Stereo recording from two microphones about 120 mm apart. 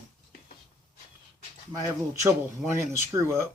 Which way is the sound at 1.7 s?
35° right (ahead or behind).